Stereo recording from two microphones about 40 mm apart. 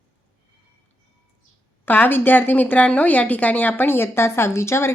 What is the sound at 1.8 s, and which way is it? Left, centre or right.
A woman's voice, left.